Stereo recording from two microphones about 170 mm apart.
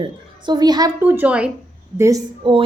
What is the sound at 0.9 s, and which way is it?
Speech, 10° right (ahead or behind).